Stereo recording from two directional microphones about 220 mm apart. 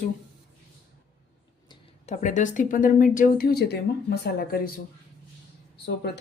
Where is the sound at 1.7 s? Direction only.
30° left (ahead or behind).